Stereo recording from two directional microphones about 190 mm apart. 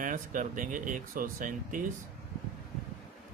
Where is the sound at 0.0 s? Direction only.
45° right (ahead or behind).